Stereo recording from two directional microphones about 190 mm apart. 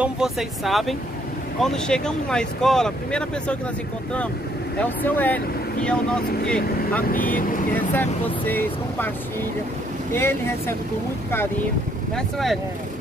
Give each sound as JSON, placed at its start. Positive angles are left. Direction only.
{"t": 0.0, "sound": "speech", "side_deg": 0}
{"t": 4.7, "sound": "speech", "side_deg": 10}
{"t": 7.1, "sound": "speech", "side_deg": 45}
{"t": 7.7, "sound": "speech", "side_deg": 10}
{"t": 12.2, "sound": "speech", "side_deg": 0}